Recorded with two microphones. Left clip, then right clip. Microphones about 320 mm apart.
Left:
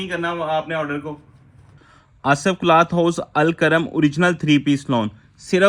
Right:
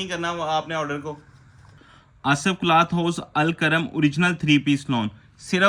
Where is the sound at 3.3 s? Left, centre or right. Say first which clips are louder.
Left 3 dB; centre.